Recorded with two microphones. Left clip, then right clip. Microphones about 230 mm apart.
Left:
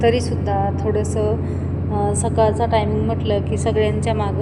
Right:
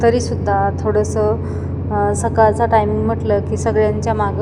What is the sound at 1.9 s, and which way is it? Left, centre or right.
Speech, right.